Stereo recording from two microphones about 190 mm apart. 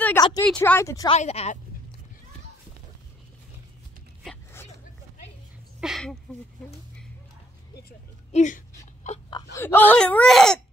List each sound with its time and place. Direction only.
0.2 s speech: 20° left (ahead or behind)
0.5 s speech: 10° left (ahead or behind)
1.1 s a woman's voice: 35° left (ahead or behind)
5.8 s a sound: centre (ahead or behind)
8.3 s a sound: 40° left (ahead or behind)
9.6 s speech: 10° left (ahead or behind)